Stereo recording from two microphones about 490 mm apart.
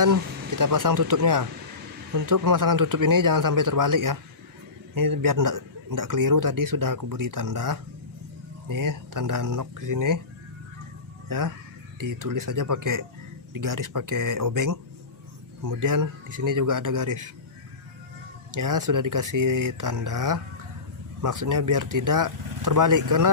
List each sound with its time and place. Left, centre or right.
0.0 s speech: right
11.3 s speech: right
18.5 s speech: right